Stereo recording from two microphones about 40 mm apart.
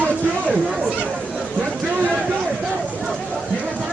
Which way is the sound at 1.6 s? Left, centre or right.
Right.